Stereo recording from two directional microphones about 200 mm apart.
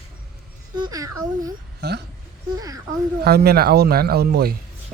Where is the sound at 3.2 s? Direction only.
50° right (ahead or behind).